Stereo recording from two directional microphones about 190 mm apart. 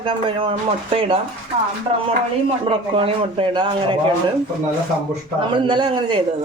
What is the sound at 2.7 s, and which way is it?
Speech, 30° right (ahead or behind).